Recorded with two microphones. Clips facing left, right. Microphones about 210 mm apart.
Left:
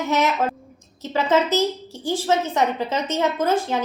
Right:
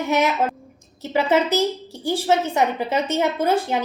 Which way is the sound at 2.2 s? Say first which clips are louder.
Right 1 dB; 15° right (ahead or behind).